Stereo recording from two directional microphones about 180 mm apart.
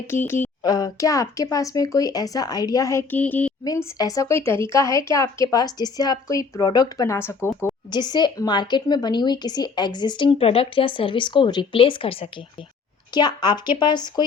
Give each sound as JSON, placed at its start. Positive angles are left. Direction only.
{"t": 0.1, "sound": "a woman's voice", "side_deg": 10}
{"t": 3.6, "sound": "a woman's voice", "side_deg": 20}